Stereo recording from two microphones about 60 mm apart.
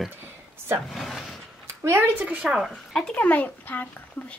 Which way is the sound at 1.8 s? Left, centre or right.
Right.